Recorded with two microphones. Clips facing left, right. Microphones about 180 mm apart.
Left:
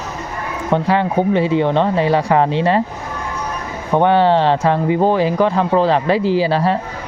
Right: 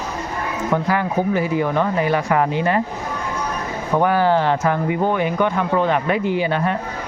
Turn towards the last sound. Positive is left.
turn(degrees=30)  # may be behind; listen again after turning